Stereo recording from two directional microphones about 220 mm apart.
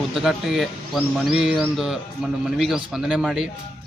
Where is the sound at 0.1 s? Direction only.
Centre (ahead or behind).